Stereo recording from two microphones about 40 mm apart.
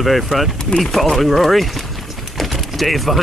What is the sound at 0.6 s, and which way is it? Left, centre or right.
Speech, centre.